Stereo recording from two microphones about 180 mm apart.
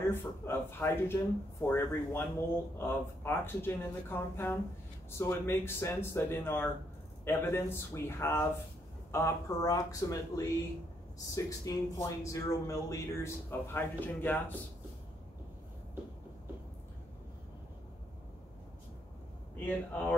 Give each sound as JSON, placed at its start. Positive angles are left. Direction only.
{"t": 0.1, "sound": "speech", "side_deg": 15}
{"t": 19.6, "sound": "speech", "side_deg": 10}